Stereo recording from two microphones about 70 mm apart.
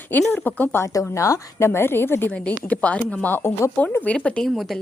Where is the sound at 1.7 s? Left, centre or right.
Left.